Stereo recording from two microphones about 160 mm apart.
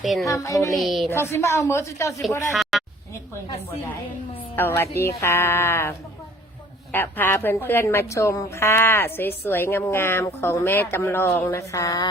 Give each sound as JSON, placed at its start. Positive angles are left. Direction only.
{"t": 0.0, "sound": "speech", "side_deg": 0}
{"t": 0.3, "sound": "a sound", "side_deg": 20}
{"t": 0.7, "sound": "speech", "side_deg": 0}
{"t": 1.1, "sound": "a woman's voice", "side_deg": 15}
{"t": 2.5, "sound": "a sound", "side_deg": 0}
{"t": 4.5, "sound": "a woman's voice", "side_deg": 15}